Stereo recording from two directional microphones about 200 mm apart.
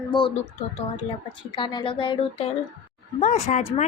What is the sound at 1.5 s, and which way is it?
Speech, 25° left (ahead or behind).